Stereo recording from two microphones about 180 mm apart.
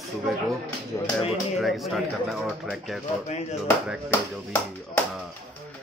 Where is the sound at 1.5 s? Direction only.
Centre (ahead or behind).